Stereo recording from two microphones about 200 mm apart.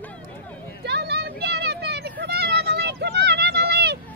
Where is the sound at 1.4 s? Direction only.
55° right (ahead or behind).